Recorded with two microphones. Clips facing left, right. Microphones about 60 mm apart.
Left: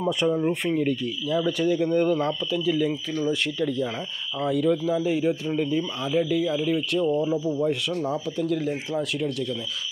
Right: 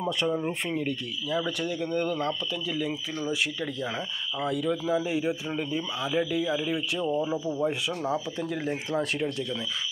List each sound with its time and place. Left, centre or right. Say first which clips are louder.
0.0 s speech: left 5 dB; centre
8.1 s speech: left 4 dB; right